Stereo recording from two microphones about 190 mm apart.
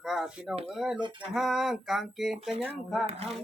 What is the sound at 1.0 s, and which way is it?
Speech, 25° right (ahead or behind).